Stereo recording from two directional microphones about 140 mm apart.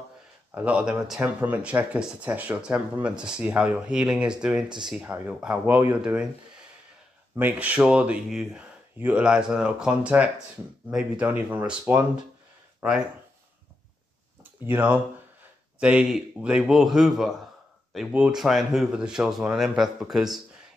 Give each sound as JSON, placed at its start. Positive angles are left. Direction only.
{"t": 0.5, "sound": "speech", "side_deg": -10}
{"t": 4.6, "sound": "speech", "side_deg": -30}
{"t": 4.9, "sound": "speech", "side_deg": -10}
{"t": 7.3, "sound": "speech", "side_deg": -10}
{"t": 14.7, "sound": "speech", "side_deg": -10}